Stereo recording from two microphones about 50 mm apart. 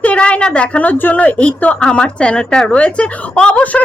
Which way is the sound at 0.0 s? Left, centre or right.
Left.